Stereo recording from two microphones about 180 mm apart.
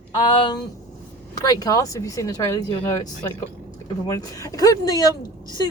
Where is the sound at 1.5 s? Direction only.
20° left (ahead or behind).